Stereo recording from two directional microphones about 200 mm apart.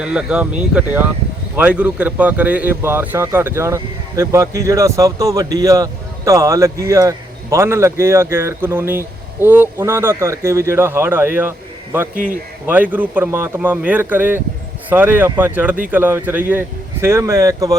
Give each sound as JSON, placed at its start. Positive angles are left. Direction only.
{"t": 0.0, "sound": "speech", "side_deg": -5}
{"t": 12.1, "sound": "speech", "side_deg": -40}
{"t": 12.6, "sound": "speech", "side_deg": -10}